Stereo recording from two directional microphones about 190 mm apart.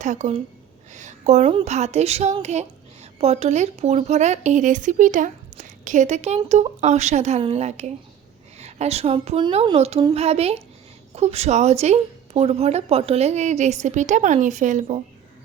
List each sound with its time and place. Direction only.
0.0 s speech: 40° right (ahead or behind)